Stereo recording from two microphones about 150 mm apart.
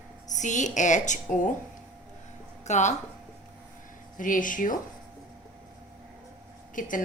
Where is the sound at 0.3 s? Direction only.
55° left (ahead or behind).